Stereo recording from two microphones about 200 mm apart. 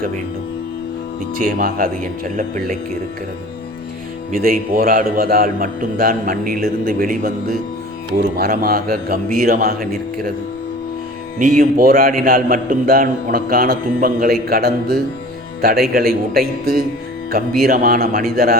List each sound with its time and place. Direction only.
1.4 s speech: 45° right (ahead or behind)
4.4 s a man's voice: 45° right (ahead or behind)
8.4 s a man's voice: 50° right (ahead or behind)
11.3 s a man's voice: 45° right (ahead or behind)